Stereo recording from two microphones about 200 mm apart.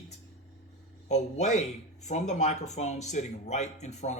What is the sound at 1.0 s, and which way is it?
Speech, 35° left (ahead or behind).